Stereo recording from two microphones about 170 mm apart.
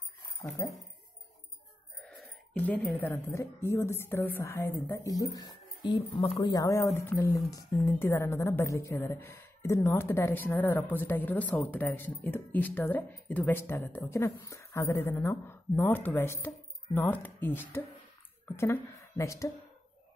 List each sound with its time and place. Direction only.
0.6 s a woman's voice: 15° left (ahead or behind)
2.0 s a woman's voice: 5° left (ahead or behind)